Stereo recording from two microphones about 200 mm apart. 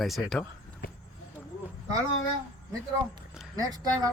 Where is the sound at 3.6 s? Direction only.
20° right (ahead or behind).